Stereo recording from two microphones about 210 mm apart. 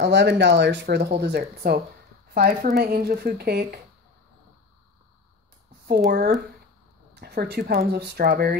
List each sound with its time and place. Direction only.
0.0 s speech: 55° right (ahead or behind)
5.9 s speech: 45° right (ahead or behind)